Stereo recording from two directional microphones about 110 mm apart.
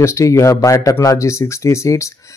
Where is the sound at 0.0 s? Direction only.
25° left (ahead or behind).